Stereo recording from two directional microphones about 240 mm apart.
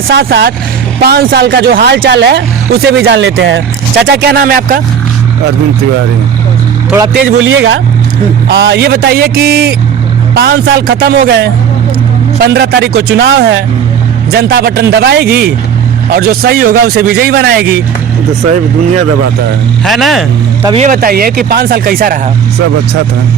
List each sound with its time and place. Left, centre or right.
0.1 s speech: right
7.3 s a man's voice: right
8.4 s speech: right
19.8 s speech: centre
20.7 s speech: right